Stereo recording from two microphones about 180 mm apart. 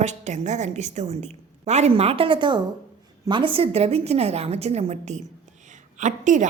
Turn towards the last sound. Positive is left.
turn(degrees=-45)  # may be behind; listen again after turning